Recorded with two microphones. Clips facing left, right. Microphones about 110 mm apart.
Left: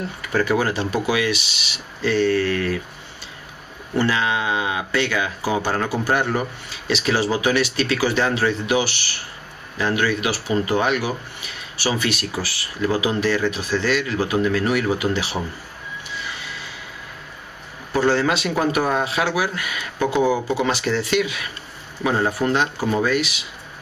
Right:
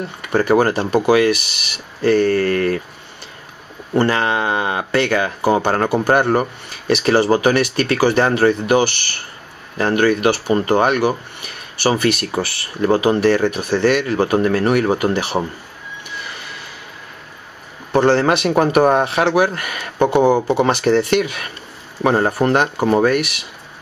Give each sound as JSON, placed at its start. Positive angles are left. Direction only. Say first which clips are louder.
{"t": 0.5, "sound": "speech", "louder": "right 9 dB", "side_deg": -50}
{"t": 3.9, "sound": "speech", "louder": "right 4 dB", "side_deg": -55}
{"t": 16.4, "sound": "train", "louder": "right 1 dB", "side_deg": -60}
{"t": 17.9, "sound": "speech", "louder": "right 5 dB", "side_deg": -60}
{"t": 20.2, "sound": "speech", "louder": "right 5 dB", "side_deg": -40}
{"t": 20.5, "sound": "speech", "louder": "right 7 dB", "side_deg": -55}